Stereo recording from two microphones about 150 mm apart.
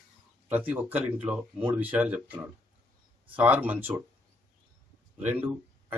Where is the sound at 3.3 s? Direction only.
10° right (ahead or behind).